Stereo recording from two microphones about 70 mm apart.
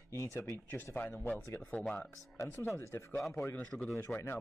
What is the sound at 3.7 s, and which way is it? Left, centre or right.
Speech, centre.